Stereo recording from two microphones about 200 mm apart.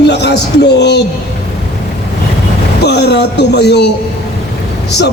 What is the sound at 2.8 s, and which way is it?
A man's voice, 55° left (ahead or behind).